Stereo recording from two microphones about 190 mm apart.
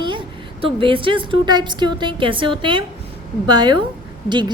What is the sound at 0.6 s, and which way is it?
A woman's voice, 25° right (ahead or behind).